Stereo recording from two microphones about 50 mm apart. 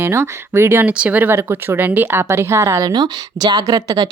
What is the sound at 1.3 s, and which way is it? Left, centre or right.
Speech, right.